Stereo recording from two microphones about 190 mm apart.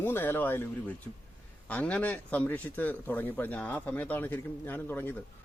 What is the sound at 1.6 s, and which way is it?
Speech, 5° left (ahead or behind).